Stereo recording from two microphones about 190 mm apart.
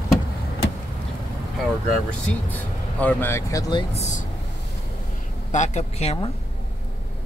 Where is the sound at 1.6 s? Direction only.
5° left (ahead or behind).